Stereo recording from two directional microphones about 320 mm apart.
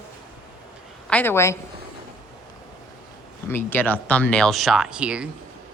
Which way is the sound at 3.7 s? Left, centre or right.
Centre.